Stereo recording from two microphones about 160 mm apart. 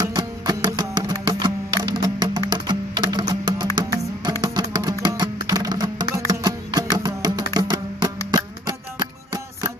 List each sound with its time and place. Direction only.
0.0 s music: 25° right (ahead or behind)